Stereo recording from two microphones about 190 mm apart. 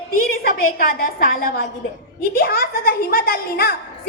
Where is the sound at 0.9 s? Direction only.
50° left (ahead or behind).